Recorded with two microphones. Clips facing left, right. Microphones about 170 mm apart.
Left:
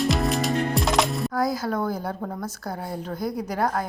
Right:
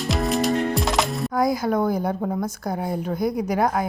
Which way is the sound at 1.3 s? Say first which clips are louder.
Right 4 dB; 15° right (ahead or behind).